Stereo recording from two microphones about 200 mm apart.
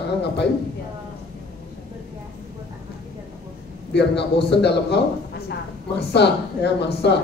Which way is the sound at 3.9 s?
60° left (ahead or behind).